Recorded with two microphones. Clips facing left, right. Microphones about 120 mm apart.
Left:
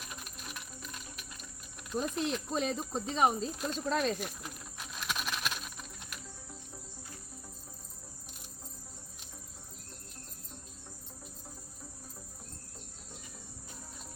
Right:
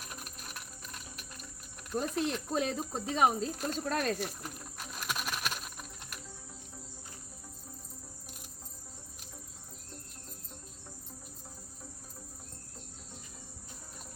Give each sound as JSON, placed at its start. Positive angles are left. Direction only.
{"t": 2.1, "sound": "speech", "side_deg": 0}